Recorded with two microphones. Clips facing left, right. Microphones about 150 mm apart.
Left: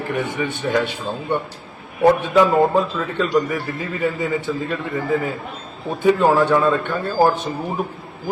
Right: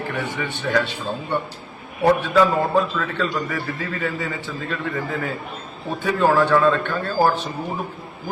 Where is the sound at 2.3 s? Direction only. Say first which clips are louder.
Left 3 dB; 20° left (ahead or behind).